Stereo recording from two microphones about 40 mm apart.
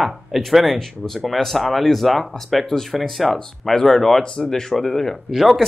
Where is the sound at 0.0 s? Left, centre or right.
Centre.